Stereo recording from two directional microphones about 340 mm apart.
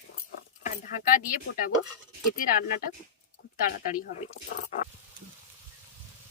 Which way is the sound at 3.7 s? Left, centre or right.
Left.